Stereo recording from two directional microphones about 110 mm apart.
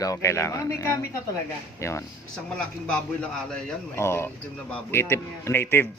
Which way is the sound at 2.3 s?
5° left (ahead or behind).